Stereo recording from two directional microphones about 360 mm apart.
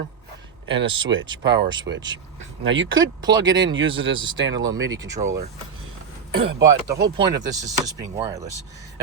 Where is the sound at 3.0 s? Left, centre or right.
Centre.